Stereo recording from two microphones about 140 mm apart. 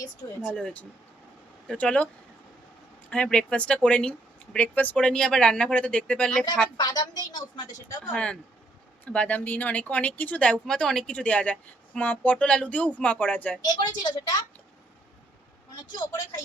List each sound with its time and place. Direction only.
0.6 s speech: 10° left (ahead or behind)
3.1 s speech: 5° left (ahead or behind)
6.7 s a woman's voice: 30° left (ahead or behind)
8.1 s speech: 5° left (ahead or behind)
13.7 s a woman's voice: 30° left (ahead or behind)